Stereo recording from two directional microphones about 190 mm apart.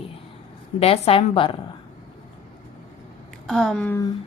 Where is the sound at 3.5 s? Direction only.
5° left (ahead or behind).